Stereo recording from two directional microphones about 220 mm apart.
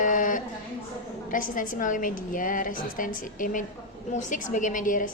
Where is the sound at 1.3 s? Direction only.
35° left (ahead or behind).